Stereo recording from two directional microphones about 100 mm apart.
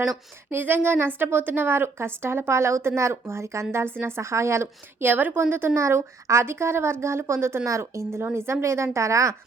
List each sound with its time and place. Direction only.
0.5 s a woman's voice: 20° right (ahead or behind)